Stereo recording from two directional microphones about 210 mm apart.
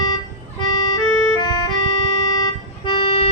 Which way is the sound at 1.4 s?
20° left (ahead or behind).